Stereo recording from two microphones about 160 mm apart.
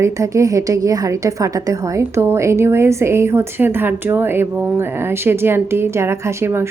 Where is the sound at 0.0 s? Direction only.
20° right (ahead or behind).